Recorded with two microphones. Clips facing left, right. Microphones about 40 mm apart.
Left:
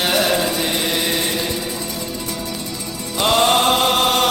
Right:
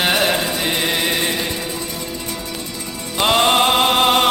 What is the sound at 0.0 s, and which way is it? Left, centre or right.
Music, right.